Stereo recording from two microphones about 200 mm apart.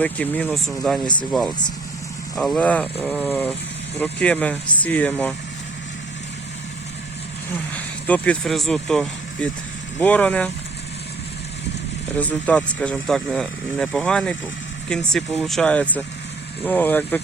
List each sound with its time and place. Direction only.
0.0 s speech: 5° left (ahead or behind)
8.0 s speech: 5° left (ahead or behind)
12.1 s speech: 5° left (ahead or behind)